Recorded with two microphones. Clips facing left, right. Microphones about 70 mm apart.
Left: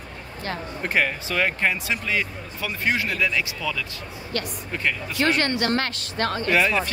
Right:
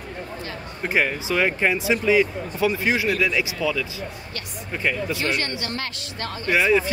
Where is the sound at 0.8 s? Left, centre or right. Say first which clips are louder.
Right 2 dB; centre.